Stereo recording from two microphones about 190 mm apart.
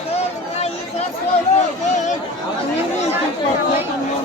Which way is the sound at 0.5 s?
35° left (ahead or behind).